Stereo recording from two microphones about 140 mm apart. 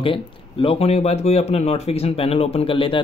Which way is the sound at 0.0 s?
40° left (ahead or behind).